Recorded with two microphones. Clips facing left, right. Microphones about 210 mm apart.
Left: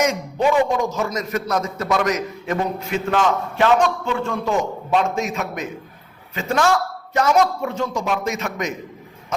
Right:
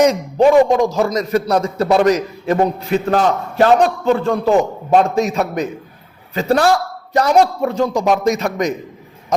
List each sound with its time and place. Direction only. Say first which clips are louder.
0.0 s a man's voice: right 7 dB; 35° right (ahead or behind)